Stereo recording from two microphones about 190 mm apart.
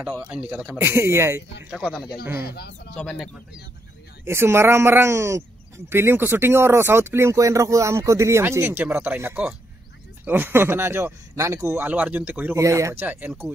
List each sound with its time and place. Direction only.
0.2 s speech: 5° right (ahead or behind)
1.7 s speech: centre (ahead or behind)
2.4 s speech: 55° left (ahead or behind)
2.9 s speech: 5° left (ahead or behind)
4.2 s speech: 15° right (ahead or behind)